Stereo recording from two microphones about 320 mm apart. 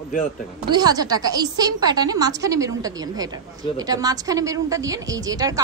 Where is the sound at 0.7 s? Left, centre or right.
Centre.